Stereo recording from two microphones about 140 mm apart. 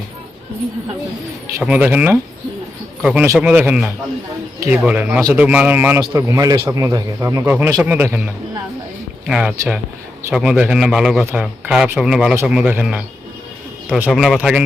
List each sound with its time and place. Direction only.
1.6 s a man's voice: 10° right (ahead or behind)
14.1 s speech: centre (ahead or behind)